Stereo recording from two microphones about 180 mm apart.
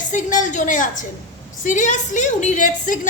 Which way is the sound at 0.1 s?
45° left (ahead or behind).